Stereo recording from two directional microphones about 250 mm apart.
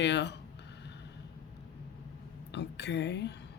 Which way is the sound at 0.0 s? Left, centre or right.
Left.